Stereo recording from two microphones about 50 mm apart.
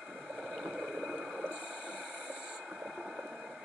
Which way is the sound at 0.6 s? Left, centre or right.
Centre.